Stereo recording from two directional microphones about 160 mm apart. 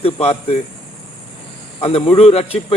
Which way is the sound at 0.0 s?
40° left (ahead or behind).